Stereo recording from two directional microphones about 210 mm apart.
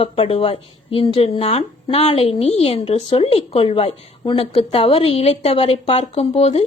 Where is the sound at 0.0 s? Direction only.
30° left (ahead or behind).